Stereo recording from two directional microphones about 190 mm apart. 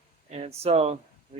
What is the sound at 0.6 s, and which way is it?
Speech, 35° right (ahead or behind).